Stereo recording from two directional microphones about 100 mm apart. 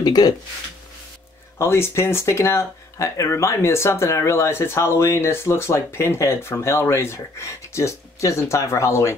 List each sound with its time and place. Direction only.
0.0 s speech: 40° left (ahead or behind)
1.6 s speech: 25° left (ahead or behind)